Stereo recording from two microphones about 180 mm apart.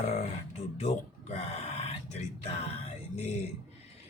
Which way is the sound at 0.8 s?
35° left (ahead or behind).